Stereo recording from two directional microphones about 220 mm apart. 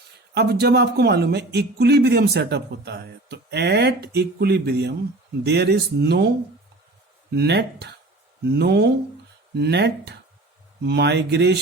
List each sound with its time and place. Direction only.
0.3 s speech: 50° right (ahead or behind)